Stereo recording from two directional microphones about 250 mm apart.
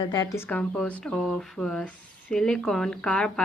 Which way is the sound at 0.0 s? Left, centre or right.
Centre.